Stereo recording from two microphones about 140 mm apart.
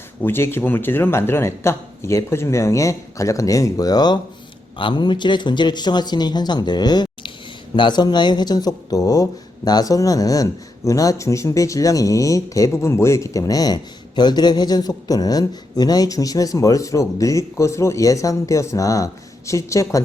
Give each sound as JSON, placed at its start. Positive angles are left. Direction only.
{"t": 0.2, "sound": "speech", "side_deg": 15}